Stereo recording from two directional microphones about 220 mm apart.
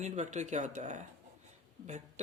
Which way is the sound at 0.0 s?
30° right (ahead or behind).